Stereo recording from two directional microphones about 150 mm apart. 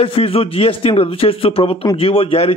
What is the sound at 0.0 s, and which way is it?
A man's voice, 40° left (ahead or behind).